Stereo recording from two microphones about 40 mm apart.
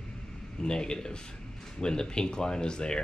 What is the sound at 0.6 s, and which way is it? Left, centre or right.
Speech, centre.